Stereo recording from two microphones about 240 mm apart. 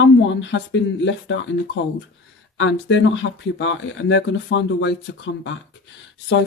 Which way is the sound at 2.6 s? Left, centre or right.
Left.